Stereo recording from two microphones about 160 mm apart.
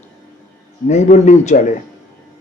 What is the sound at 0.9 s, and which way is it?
Speech, 45° left (ahead or behind).